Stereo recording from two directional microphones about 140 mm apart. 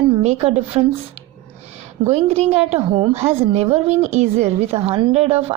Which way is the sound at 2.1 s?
50° right (ahead or behind).